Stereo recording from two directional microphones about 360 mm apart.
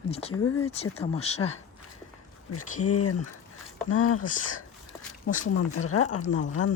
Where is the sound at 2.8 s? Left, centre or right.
Left.